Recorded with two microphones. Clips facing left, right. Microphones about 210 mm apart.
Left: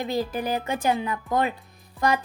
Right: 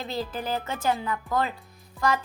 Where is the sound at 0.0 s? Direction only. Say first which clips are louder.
Left 5 dB; 15° left (ahead or behind).